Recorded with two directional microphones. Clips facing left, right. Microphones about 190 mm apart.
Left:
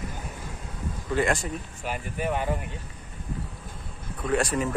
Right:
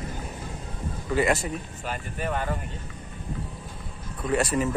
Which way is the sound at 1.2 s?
5° right (ahead or behind).